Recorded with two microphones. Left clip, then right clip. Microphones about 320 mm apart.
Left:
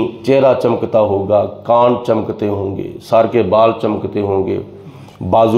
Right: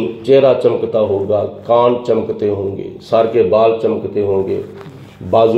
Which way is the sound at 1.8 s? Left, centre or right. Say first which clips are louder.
Even; left.